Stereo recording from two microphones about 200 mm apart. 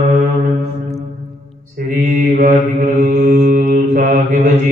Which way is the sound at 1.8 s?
40° right (ahead or behind).